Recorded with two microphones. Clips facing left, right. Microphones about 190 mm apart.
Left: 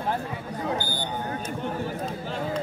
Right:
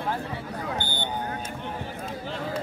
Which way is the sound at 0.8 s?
25° right (ahead or behind).